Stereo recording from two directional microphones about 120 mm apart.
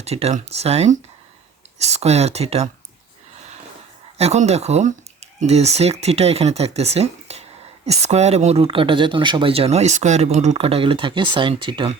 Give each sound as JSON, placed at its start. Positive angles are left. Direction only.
{"t": 0.0, "sound": "speech", "side_deg": -60}
{"t": 4.2, "sound": "speech", "side_deg": -65}